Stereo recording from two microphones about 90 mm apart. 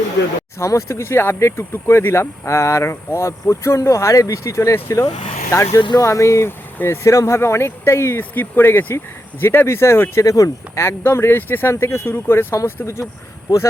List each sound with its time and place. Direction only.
0.6 s speech: 35° left (ahead or behind)
10.2 s speech: 40° left (ahead or behind)